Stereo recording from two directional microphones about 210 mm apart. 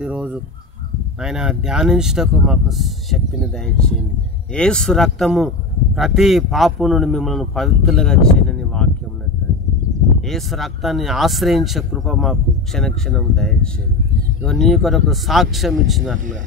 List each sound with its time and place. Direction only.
0.0 s speech: 5° right (ahead or behind)
10.2 s speech: centre (ahead or behind)